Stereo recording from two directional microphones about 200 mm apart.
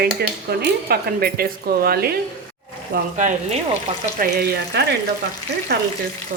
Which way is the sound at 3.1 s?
40° right (ahead or behind).